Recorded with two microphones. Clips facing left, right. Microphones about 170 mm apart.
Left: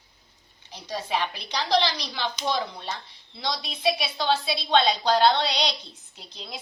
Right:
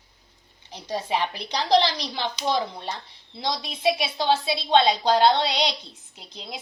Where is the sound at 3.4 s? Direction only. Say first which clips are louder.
Right 2 dB; 25° right (ahead or behind).